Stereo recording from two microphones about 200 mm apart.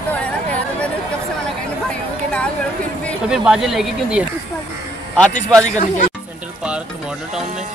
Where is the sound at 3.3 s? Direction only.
5° right (ahead or behind).